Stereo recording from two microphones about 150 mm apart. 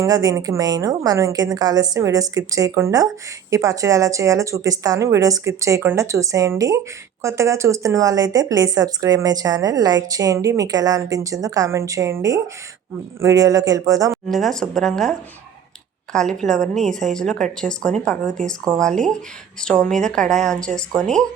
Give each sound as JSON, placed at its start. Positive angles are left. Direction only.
{"t": 0.0, "sound": "speech", "side_deg": -25}
{"t": 14.1, "sound": "a woman's voice", "side_deg": 0}
{"t": 16.1, "sound": "a woman's voice", "side_deg": 0}